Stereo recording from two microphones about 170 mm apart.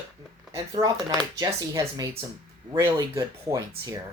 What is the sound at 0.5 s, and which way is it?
Speech, 20° right (ahead or behind).